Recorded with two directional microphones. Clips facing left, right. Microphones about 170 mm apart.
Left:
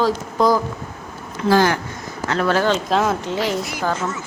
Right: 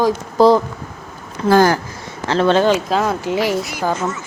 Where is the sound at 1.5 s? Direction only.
45° right (ahead or behind).